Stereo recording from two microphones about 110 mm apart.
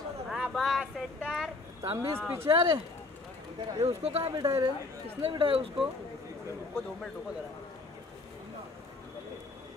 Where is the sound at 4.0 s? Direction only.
70° right (ahead or behind).